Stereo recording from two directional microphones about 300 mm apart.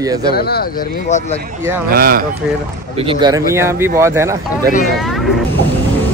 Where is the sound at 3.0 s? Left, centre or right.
Centre.